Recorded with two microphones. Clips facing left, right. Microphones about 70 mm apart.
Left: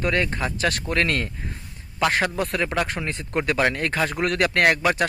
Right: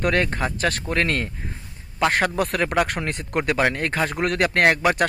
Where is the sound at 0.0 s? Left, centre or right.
Right.